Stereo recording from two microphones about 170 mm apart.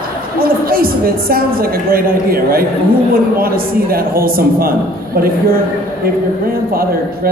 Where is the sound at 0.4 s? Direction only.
60° right (ahead or behind).